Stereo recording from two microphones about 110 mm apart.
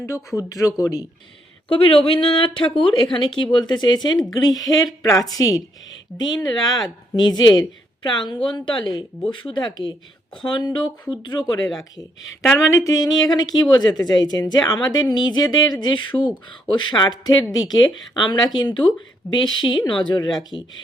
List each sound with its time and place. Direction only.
0.3 s a woman's voice: 30° left (ahead or behind)
1.7 s a woman's voice: 55° left (ahead or behind); by 20.6 s 40° left (ahead or behind)